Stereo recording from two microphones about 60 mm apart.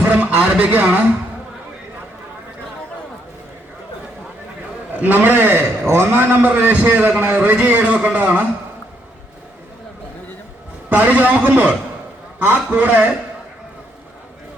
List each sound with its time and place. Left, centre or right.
0.1 s a man's voice: right
4.9 s a man's voice: right
10.8 s a man's voice: right